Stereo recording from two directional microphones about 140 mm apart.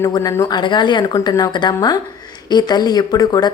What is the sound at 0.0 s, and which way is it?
Speech, 20° left (ahead or behind).